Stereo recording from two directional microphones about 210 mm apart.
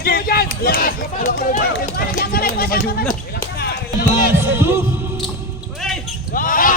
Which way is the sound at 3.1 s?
45° left (ahead or behind).